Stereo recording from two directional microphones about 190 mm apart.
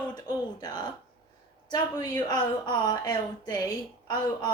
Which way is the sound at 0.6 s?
20° left (ahead or behind).